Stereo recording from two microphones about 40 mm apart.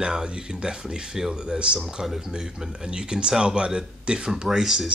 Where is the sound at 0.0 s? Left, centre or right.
Right.